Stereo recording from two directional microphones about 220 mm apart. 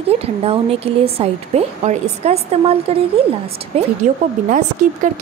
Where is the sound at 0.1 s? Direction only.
25° right (ahead or behind).